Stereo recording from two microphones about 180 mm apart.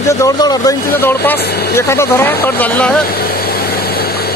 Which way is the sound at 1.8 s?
15° left (ahead or behind).